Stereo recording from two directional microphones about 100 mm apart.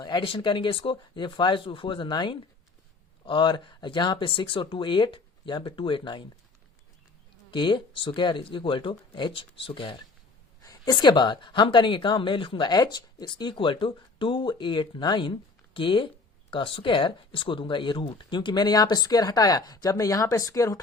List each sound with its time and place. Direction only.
0.0 s a woman's voice: 50° left (ahead or behind)
7.5 s speech: 55° left (ahead or behind)
10.6 s a woman's voice: 40° left (ahead or behind)